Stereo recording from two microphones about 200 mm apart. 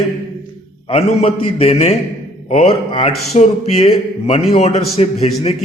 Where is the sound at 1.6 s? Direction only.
30° left (ahead or behind).